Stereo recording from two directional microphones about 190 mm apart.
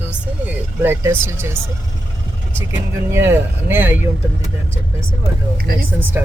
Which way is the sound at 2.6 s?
15° right (ahead or behind).